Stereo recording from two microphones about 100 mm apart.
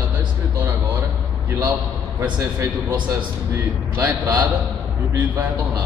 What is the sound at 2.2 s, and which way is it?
Speech, 30° right (ahead or behind).